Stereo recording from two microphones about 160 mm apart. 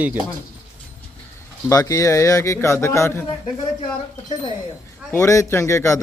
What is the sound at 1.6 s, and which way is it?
A man's voice, 20° left (ahead or behind).